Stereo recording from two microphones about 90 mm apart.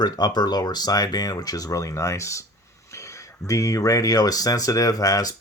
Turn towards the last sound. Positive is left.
turn(degrees=45)  # may be behind; listen again after turning